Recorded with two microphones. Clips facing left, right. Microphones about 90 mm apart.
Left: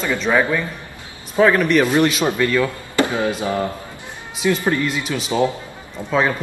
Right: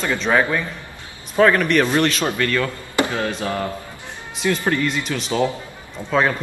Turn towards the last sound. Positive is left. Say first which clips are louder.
# even
turn(degrees=5)  # may be behind; listen again after turning